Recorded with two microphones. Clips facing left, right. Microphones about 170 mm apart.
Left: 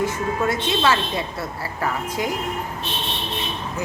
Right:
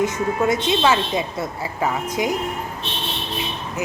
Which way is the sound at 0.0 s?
20° right (ahead or behind).